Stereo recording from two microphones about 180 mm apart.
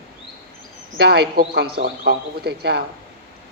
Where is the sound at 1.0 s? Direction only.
65° right (ahead or behind).